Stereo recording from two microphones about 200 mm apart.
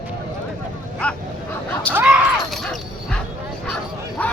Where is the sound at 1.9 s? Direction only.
5° left (ahead or behind).